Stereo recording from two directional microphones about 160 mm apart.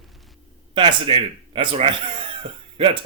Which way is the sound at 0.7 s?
30° right (ahead or behind).